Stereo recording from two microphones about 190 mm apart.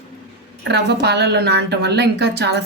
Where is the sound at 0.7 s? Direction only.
60° right (ahead or behind).